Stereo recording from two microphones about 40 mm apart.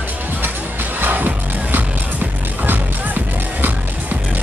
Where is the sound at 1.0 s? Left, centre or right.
Right.